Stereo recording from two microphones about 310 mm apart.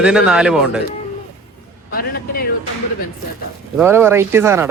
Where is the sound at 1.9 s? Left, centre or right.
Left.